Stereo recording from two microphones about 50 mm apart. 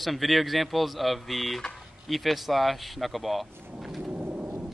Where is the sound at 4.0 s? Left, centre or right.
Right.